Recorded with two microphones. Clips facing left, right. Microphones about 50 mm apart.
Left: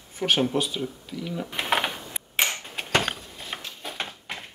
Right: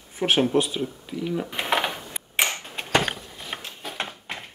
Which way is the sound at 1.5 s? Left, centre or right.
Centre.